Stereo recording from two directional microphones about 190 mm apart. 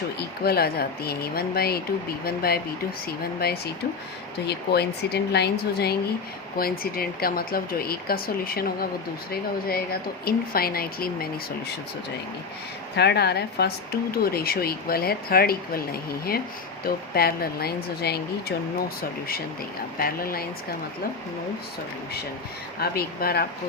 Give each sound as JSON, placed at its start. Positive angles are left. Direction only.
{"t": 0.2, "sound": "speech", "side_deg": 55}
{"t": 13.0, "sound": "speech", "side_deg": 60}
{"t": 20.0, "sound": "speech", "side_deg": 50}
{"t": 22.8, "sound": "speech", "side_deg": 55}